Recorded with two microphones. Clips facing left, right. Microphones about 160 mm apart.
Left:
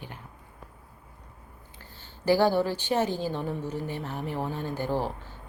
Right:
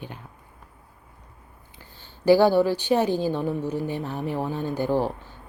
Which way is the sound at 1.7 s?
15° right (ahead or behind).